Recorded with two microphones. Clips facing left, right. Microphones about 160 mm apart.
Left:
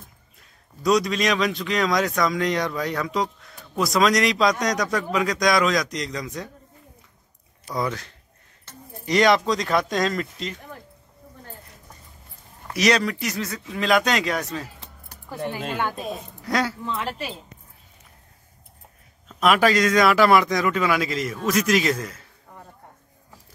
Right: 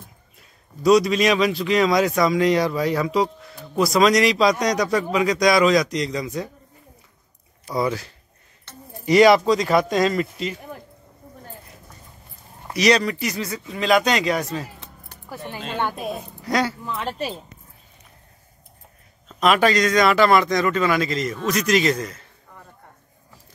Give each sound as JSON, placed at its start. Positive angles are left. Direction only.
{"t": 0.8, "sound": "speech", "side_deg": -5}
{"t": 7.6, "sound": "speech", "side_deg": -5}
{"t": 12.7, "sound": "speech", "side_deg": 0}
{"t": 16.4, "sound": "speech", "side_deg": 0}
{"t": 19.2, "sound": "speech", "side_deg": 5}